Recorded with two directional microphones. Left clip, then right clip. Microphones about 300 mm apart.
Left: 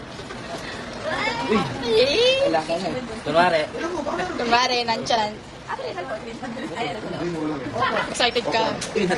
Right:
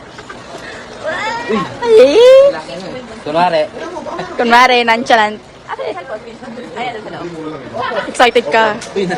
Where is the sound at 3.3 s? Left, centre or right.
Right.